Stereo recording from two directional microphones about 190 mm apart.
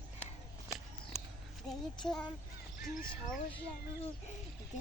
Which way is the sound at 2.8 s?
45° left (ahead or behind).